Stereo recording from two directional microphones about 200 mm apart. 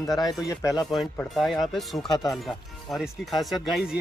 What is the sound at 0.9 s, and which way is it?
Speech, centre (ahead or behind).